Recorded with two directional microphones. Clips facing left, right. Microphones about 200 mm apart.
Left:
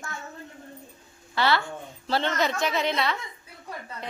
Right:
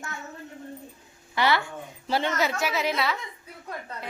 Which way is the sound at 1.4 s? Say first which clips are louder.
Even; 15° right (ahead or behind).